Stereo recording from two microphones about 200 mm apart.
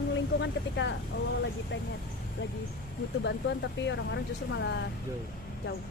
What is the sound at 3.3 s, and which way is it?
Speech, 60° left (ahead or behind).